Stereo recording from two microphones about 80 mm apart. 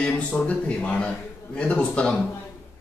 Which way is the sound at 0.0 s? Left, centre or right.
Centre.